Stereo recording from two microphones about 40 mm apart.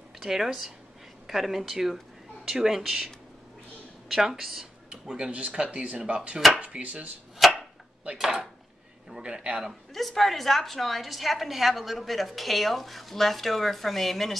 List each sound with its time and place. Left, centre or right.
0.2 s a woman's voice: centre
4.1 s speech: centre
5.0 s speech: centre
7.4 s arrow: centre
9.9 s a woman's voice: centre